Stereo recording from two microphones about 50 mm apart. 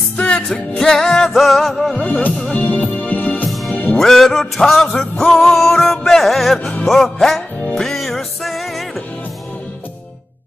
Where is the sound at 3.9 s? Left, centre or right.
Centre.